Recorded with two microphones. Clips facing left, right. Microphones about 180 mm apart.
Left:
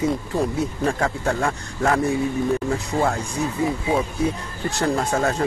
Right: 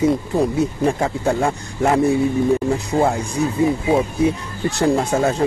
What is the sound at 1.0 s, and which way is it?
Speech, 20° right (ahead or behind).